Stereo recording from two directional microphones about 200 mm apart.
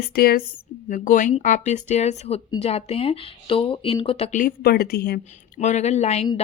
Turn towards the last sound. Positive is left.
turn(degrees=30)  # may be behind; listen again after turning